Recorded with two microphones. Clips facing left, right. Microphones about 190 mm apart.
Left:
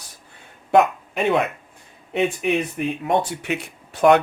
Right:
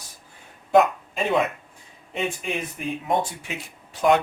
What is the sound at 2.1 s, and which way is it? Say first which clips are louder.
Speech: left 7 dB; 65° left (ahead or behind).